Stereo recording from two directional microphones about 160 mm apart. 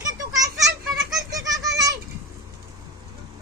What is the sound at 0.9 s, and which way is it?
Baby laughter, centre (ahead or behind).